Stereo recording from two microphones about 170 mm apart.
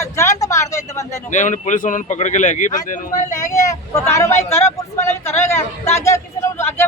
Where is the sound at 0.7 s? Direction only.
20° left (ahead or behind).